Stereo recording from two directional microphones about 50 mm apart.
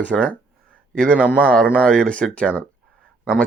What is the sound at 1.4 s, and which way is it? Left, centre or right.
Speech, centre.